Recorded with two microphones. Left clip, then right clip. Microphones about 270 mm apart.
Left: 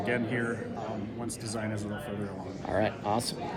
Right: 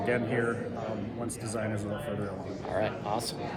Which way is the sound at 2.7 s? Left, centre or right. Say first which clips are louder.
Left 2 dB; left.